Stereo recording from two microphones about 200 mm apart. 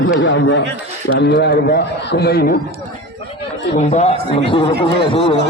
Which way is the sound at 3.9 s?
30° left (ahead or behind).